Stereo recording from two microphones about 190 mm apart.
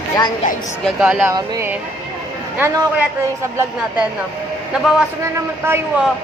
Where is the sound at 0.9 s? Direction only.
Centre (ahead or behind).